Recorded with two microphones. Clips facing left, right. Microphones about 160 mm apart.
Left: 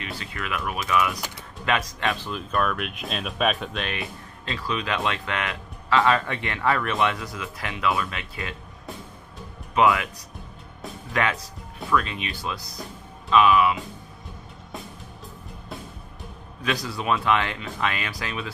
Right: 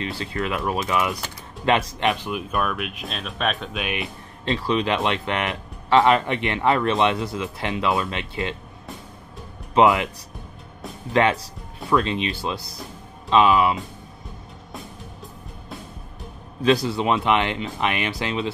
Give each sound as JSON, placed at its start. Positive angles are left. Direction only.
{"t": 0.0, "sound": "speech", "side_deg": -30}
{"t": 3.8, "sound": "speech", "side_deg": -20}
{"t": 9.8, "sound": "speech", "side_deg": -25}
{"t": 11.1, "sound": "speech", "side_deg": -25}
{"t": 16.6, "sound": "speech", "side_deg": -30}